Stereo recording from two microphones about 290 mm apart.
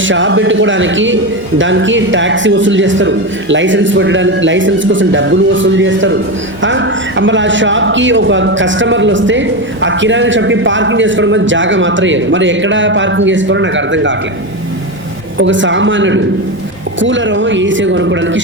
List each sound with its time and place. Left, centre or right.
0.0 s speech: right
15.4 s speech: right